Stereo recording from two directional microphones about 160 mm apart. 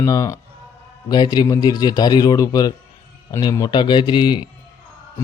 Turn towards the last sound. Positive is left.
turn(degrees=30)  # may be behind; listen again after turning